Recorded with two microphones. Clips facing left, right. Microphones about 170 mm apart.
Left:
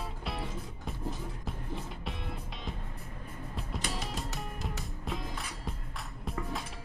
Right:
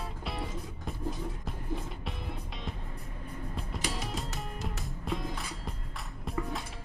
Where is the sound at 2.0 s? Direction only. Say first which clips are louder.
Even; centre (ahead or behind).